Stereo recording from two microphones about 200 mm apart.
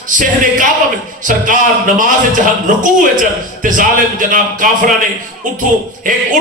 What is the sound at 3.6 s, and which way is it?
Speech, 40° right (ahead or behind).